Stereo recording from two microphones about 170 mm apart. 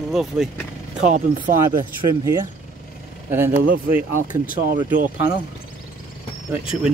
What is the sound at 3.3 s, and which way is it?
Speech, 15° right (ahead or behind).